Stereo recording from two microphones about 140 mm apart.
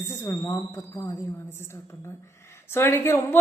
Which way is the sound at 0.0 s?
20° left (ahead or behind).